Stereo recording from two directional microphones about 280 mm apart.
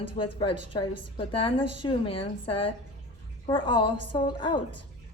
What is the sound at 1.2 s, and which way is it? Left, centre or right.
Speech, centre.